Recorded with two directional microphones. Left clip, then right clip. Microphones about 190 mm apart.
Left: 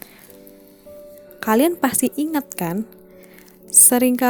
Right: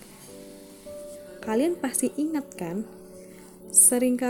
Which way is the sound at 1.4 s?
50° left (ahead or behind).